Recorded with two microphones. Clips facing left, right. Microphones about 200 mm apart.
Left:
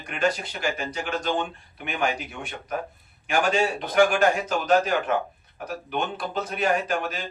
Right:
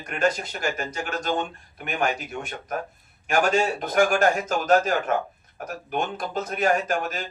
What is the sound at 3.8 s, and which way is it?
Speech, 45° right (ahead or behind).